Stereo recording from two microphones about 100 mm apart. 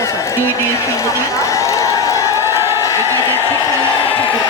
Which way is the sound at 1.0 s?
30° left (ahead or behind).